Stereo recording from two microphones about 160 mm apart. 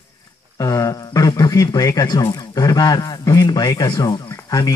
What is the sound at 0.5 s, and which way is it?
Speech, 20° left (ahead or behind).